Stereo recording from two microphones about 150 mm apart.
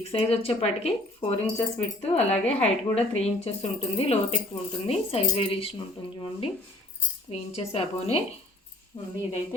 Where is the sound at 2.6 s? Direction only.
45° left (ahead or behind).